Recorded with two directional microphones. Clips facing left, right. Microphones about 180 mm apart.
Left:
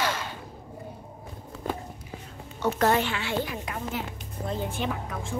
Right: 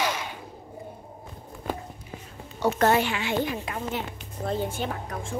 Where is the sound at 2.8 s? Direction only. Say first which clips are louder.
Right 1 dB; 10° right (ahead or behind); by 4.0 s 25° right (ahead or behind).